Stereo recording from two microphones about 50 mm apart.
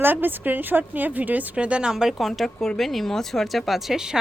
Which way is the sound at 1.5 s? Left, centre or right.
Right.